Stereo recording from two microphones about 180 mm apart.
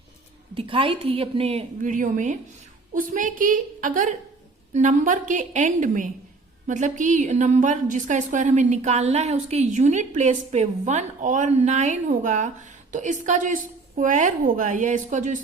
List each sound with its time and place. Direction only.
0.5 s a woman's voice: 30° right (ahead or behind)